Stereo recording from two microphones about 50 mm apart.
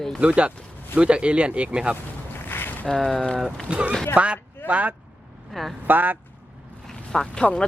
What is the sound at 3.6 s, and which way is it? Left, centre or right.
Speech, right.